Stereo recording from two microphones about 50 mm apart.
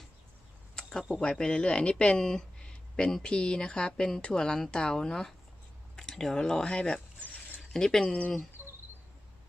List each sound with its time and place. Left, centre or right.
0.8 s a sound: centre
1.1 s speech: centre
7.7 s speech: centre
8.0 s speech: left
8.6 s insect: right